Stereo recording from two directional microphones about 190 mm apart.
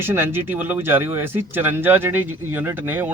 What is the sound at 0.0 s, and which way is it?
Speech, 10° right (ahead or behind).